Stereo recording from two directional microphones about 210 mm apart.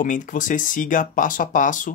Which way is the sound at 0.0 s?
35° left (ahead or behind).